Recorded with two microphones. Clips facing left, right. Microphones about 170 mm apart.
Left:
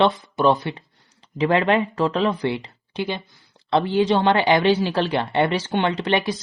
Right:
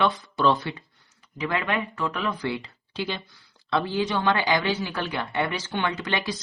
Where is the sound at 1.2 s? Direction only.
35° left (ahead or behind).